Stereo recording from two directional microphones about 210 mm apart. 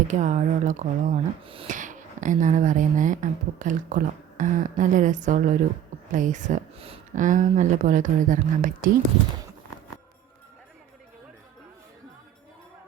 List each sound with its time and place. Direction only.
0.1 s speech: 35° right (ahead or behind)